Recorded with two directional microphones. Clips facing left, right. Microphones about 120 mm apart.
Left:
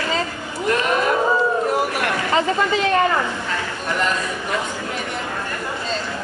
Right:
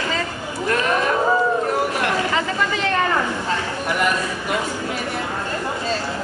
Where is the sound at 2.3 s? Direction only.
25° left (ahead or behind).